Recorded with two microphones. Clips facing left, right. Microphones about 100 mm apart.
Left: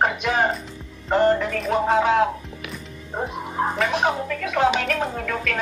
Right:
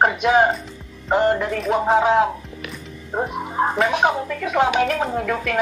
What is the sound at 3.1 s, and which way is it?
Music, 30° right (ahead or behind).